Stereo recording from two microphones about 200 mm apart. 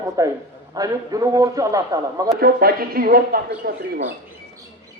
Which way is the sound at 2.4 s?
50° right (ahead or behind).